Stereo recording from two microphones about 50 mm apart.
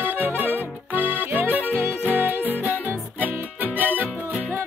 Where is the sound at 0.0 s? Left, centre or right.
Right.